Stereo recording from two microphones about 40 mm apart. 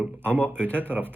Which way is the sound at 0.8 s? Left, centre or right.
Right.